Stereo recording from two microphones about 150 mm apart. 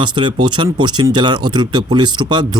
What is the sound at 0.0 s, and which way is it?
Speech, 30° right (ahead or behind).